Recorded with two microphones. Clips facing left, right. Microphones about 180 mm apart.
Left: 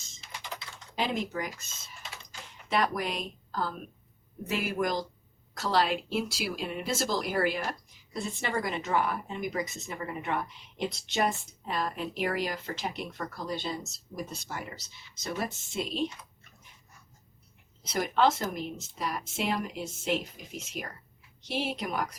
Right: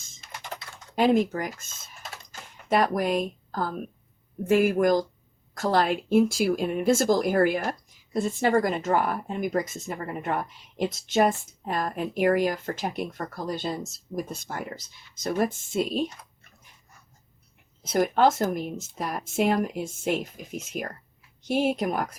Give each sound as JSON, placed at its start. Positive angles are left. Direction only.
{"t": 0.0, "sound": "typing", "side_deg": -50}
{"t": 4.4, "sound": "speech", "side_deg": -50}
{"t": 17.8, "sound": "speech", "side_deg": -50}